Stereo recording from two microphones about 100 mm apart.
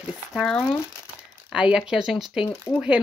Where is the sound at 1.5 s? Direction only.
10° right (ahead or behind).